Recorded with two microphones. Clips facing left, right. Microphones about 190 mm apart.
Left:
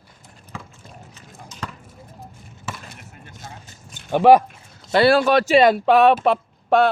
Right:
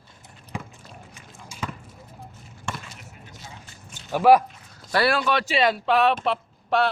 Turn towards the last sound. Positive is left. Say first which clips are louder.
# left 6 dB
turn(degrees=50)  # may be behind; listen again after turning